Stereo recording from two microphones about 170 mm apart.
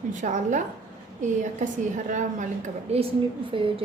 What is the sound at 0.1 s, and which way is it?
A woman's voice, 45° right (ahead or behind).